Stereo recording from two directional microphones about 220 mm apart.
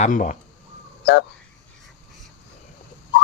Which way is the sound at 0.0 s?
35° left (ahead or behind).